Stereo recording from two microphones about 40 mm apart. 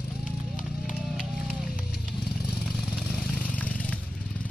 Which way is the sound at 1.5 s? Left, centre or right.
Centre.